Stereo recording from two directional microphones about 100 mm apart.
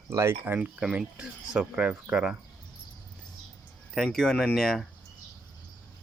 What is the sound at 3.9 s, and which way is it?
Speech, 5° left (ahead or behind).